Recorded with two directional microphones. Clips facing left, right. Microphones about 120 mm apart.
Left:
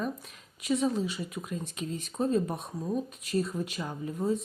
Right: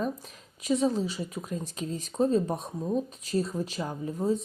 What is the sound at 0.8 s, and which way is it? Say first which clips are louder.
Speech: right 2 dB; 30° right (ahead or behind).